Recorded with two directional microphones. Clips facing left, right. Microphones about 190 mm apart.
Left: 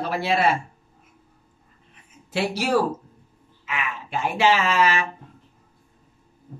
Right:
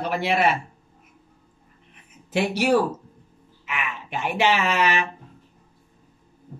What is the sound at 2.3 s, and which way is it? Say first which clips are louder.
Speech: right 2 dB; 15° right (ahead or behind).